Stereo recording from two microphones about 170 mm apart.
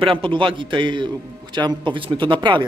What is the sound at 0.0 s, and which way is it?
A man's voice, 30° right (ahead or behind).